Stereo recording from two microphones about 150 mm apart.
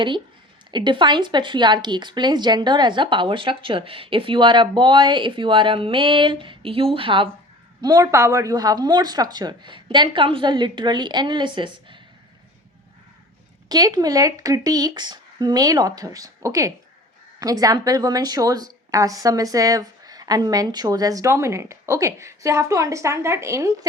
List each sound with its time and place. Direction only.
0.7 s speech: 30° right (ahead or behind)
7.8 s speech: 25° right (ahead or behind)
13.7 s speech: 25° right (ahead or behind)